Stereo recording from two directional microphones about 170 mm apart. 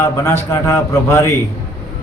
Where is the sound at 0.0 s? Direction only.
15° left (ahead or behind).